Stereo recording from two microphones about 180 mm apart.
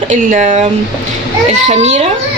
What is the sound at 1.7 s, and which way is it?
Speech, 40° right (ahead or behind).